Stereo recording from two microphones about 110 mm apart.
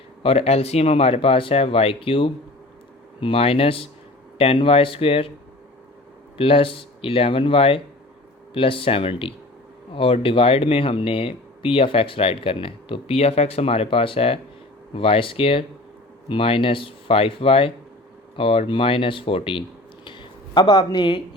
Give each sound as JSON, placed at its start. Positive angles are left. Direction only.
{"t": 0.2, "sound": "speech", "side_deg": 65}
{"t": 6.3, "sound": "speech", "side_deg": 55}
{"t": 20.1, "sound": "a sound", "side_deg": 45}